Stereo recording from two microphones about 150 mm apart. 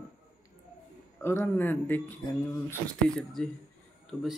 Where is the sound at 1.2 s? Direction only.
15° left (ahead or behind).